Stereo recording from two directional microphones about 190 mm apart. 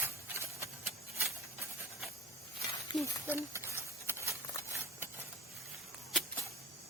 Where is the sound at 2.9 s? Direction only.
25° left (ahead or behind).